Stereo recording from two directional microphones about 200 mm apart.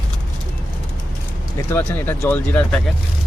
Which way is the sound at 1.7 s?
10° left (ahead or behind).